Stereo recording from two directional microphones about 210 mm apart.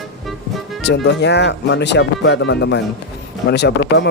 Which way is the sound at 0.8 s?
55° left (ahead or behind).